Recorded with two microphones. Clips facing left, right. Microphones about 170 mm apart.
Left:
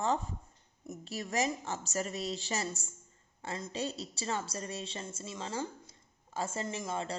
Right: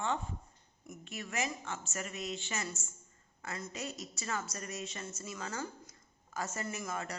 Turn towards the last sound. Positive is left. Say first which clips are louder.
# left 3 dB
turn(degrees=30)  # may be behind; listen again after turning